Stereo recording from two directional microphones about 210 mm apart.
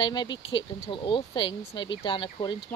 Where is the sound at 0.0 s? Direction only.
20° left (ahead or behind).